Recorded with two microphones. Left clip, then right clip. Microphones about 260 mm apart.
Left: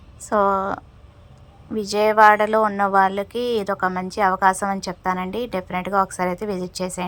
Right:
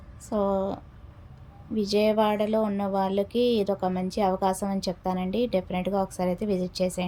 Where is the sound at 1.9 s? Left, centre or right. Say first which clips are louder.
Left 10 dB; left.